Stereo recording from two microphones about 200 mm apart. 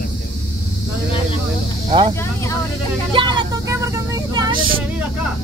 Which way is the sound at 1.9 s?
25° right (ahead or behind).